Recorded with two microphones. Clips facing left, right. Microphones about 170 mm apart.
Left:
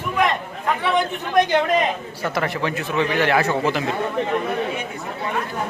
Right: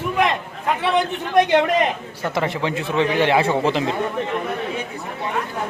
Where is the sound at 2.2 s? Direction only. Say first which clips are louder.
Right 1 dB; 20° right (ahead or behind).